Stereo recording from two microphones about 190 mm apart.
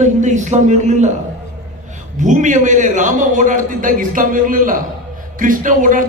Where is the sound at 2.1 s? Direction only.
40° right (ahead or behind).